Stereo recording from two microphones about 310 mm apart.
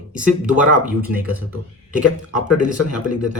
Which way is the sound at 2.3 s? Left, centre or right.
Left.